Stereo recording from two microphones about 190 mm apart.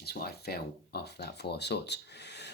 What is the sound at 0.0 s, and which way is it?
Speech, 55° left (ahead or behind).